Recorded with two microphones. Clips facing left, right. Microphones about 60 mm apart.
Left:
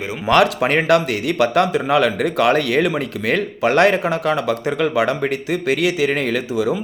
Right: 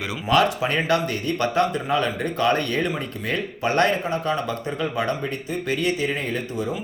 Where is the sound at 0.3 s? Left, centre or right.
Left.